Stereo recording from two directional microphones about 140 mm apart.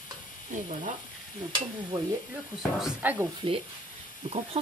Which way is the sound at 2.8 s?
10° right (ahead or behind).